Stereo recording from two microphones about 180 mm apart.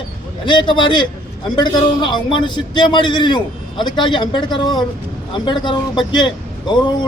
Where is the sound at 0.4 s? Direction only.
25° left (ahead or behind).